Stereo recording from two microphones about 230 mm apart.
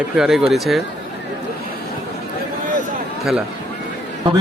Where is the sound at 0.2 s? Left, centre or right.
Centre.